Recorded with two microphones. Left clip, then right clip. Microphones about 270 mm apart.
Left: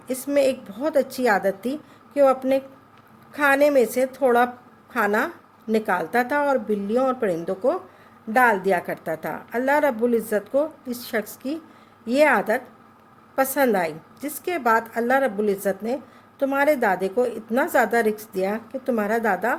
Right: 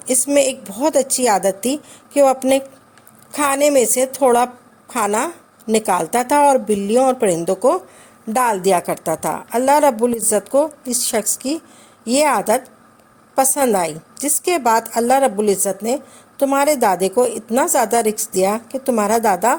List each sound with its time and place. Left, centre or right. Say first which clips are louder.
0.1 s a woman's voice: right 5 dB; right